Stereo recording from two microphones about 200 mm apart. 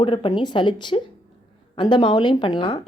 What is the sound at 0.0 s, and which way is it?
Speech, 25° left (ahead or behind).